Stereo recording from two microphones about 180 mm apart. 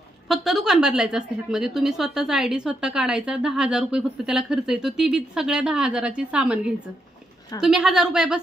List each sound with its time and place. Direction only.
0.3 s a woman's voice: centre (ahead or behind)